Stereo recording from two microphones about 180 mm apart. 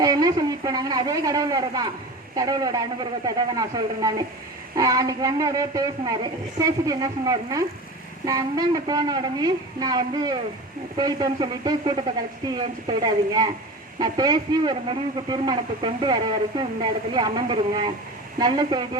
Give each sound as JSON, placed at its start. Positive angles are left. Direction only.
{"t": 0.0, "sound": "speech", "side_deg": -20}